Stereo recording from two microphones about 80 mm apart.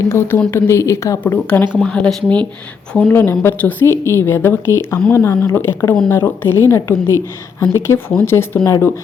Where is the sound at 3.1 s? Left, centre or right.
Left.